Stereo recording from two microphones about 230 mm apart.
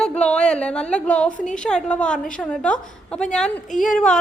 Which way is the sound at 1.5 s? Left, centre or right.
Centre.